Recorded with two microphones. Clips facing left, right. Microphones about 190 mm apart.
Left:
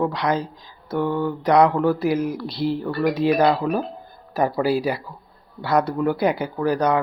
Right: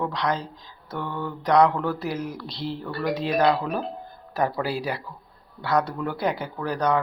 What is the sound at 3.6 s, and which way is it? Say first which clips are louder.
Speech: left 5 dB; 40° left (ahead or behind).